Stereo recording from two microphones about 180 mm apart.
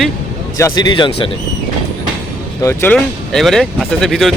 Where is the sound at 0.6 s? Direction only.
25° left (ahead or behind).